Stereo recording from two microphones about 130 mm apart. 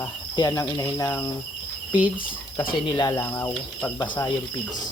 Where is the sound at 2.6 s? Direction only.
40° left (ahead or behind).